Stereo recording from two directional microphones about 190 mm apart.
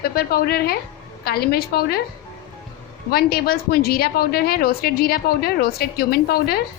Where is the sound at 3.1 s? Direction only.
55° left (ahead or behind).